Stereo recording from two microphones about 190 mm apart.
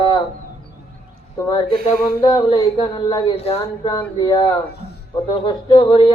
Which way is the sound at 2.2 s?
20° left (ahead or behind).